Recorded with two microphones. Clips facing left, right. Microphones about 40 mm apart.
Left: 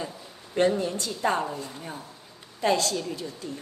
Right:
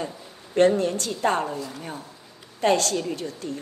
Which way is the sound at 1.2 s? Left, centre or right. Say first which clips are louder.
Right 2 dB; right.